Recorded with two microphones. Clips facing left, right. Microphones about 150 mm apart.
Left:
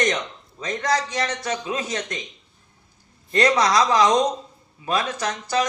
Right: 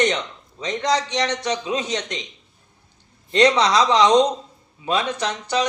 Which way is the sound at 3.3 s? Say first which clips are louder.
Right 2 dB; 25° right (ahead or behind).